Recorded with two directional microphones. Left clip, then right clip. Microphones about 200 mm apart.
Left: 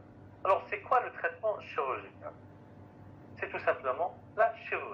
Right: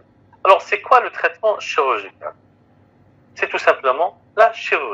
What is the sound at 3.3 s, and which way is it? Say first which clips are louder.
A man's voice: right 16 dB; 50° right (ahead or behind).